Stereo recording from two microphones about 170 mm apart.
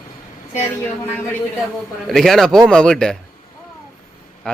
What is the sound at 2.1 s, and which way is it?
A man's voice, centre (ahead or behind).